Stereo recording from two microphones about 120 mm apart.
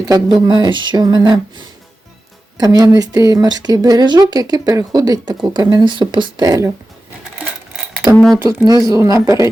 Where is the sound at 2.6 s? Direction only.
30° right (ahead or behind).